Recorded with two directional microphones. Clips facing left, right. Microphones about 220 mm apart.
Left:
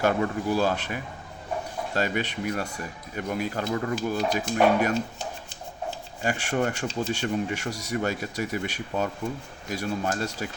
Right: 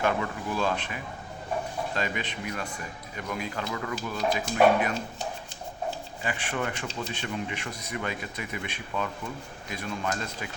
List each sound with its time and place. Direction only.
0.0 s speech: 40° left (ahead or behind)
6.2 s speech: 45° left (ahead or behind)